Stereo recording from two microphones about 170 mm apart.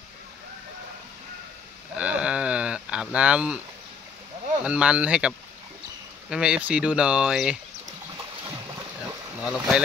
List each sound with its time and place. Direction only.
2.0 s a sound: 5° right (ahead or behind)
4.6 s speech: 5° right (ahead or behind)
6.3 s speech: 5° right (ahead or behind)
9.4 s speech: 5° right (ahead or behind)